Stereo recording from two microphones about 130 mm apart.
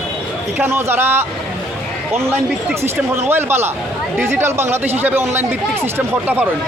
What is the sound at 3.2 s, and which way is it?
A man's voice, 15° right (ahead or behind).